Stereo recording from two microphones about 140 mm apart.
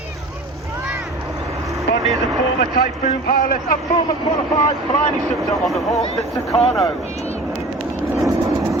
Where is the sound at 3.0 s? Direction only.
70° left (ahead or behind).